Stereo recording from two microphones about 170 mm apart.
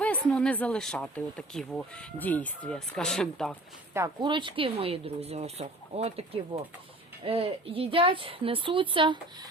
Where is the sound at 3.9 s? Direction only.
15° right (ahead or behind).